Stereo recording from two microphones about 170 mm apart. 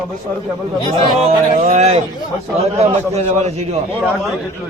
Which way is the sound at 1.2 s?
40° right (ahead or behind).